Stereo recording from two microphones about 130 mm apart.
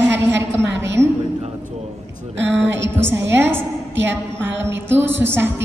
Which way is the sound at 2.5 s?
15° right (ahead or behind).